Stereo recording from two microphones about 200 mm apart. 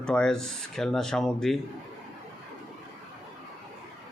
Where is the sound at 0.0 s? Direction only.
5° left (ahead or behind).